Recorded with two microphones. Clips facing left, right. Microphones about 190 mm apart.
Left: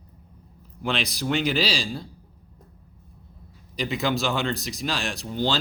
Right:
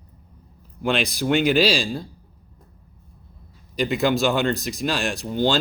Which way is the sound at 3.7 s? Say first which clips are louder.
Right 5 dB; 50° right (ahead or behind).